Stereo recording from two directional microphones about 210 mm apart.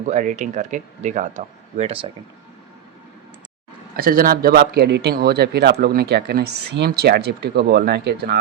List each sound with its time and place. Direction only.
0.0 s speech: 35° right (ahead or behind)
3.9 s speech: 45° right (ahead or behind)